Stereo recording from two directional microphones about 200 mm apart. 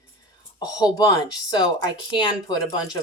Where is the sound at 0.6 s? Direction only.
20° left (ahead or behind).